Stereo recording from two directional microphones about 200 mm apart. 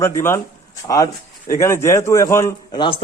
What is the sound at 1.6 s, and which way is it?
A man's voice, 15° left (ahead or behind).